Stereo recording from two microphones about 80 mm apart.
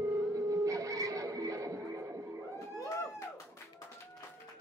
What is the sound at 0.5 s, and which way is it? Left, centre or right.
Music, right.